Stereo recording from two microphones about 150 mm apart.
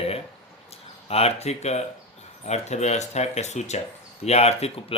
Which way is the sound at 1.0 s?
45° left (ahead or behind).